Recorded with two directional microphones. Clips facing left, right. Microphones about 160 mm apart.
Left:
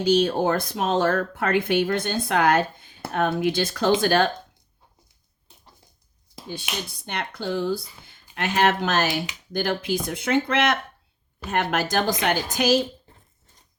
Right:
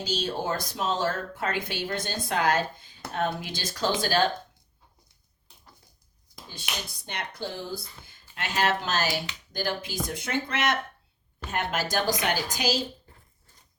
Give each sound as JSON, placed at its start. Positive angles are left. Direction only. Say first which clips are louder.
{"t": 0.0, "sound": "speech", "louder": "left 10 dB", "side_deg": 60}
{"t": 7.1, "sound": "speech", "louder": "left 7 dB", "side_deg": 60}